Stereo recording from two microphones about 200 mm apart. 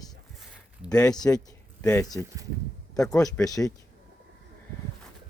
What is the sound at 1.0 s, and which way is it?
Speech, 20° left (ahead or behind).